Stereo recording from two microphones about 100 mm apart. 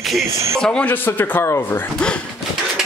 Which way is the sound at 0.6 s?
10° left (ahead or behind).